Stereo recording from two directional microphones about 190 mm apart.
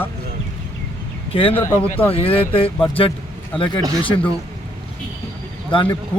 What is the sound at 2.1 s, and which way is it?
Speech, 30° left (ahead or behind).